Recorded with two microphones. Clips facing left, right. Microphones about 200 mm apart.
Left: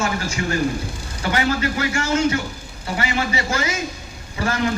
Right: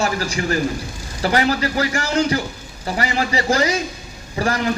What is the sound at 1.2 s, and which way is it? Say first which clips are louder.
A man's voice: right 3 dB; 35° right (ahead or behind).